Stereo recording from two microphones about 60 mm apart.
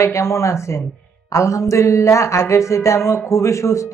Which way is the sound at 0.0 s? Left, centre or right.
Left.